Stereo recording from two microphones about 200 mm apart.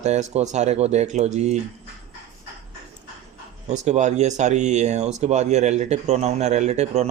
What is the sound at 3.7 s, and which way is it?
Speech, 35° right (ahead or behind).